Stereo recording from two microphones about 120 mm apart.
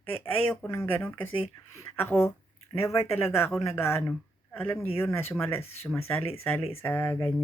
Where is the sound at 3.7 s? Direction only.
20° left (ahead or behind).